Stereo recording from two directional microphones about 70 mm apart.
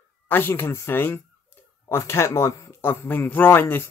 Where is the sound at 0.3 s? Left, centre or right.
Left.